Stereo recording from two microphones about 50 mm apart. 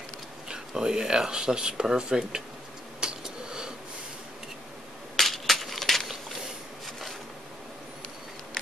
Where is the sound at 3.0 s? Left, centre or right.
Centre.